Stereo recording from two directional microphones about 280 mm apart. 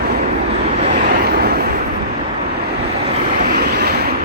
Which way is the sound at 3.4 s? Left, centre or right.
Right.